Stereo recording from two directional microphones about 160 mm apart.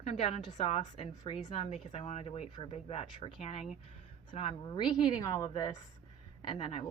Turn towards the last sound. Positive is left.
turn(degrees=35)  # may be behind; listen again after turning